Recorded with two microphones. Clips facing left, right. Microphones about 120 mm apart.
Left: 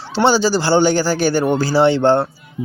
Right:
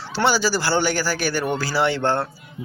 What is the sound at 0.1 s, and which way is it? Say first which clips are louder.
Speech: left 6 dB; 25° left (ahead or behind).